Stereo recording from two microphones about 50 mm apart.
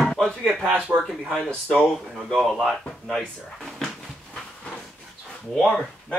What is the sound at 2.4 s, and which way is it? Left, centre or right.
Speech, centre.